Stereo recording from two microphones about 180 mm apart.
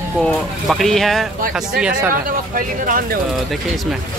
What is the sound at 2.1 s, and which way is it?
Speech, 50° right (ahead or behind).